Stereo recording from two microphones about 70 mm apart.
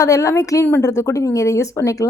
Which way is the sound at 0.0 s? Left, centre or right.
Left.